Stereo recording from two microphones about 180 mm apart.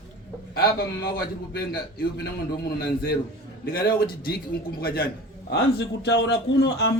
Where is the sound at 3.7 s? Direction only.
55° left (ahead or behind).